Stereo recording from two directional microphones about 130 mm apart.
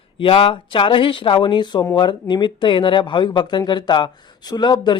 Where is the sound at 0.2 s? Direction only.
40° left (ahead or behind).